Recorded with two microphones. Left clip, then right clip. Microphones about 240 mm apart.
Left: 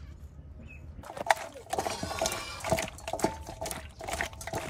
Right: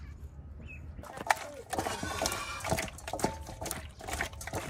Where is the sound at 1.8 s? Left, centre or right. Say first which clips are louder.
Left 1 dB; left.